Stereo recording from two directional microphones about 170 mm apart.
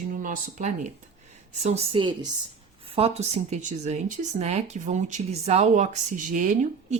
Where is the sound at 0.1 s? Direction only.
50° right (ahead or behind).